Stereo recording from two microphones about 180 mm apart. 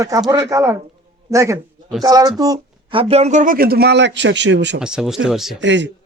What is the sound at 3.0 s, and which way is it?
A man's voice, 35° right (ahead or behind).